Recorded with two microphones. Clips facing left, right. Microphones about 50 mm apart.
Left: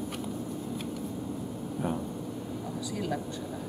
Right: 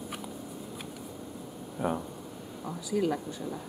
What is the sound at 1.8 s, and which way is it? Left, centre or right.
Speech, centre.